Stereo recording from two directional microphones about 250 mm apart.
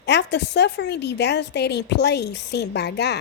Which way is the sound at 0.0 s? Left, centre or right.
Left.